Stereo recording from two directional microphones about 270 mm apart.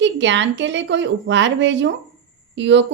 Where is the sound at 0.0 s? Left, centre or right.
Right.